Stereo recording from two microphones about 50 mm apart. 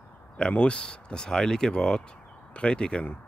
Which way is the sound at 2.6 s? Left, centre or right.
Centre.